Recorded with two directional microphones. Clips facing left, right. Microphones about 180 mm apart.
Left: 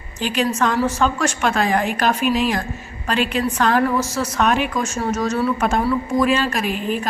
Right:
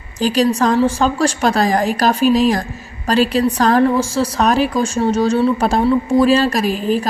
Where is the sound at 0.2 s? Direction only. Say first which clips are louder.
Right 5 dB; 35° right (ahead or behind).